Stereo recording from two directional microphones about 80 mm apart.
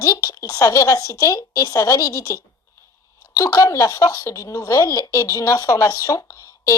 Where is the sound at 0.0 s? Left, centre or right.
Left.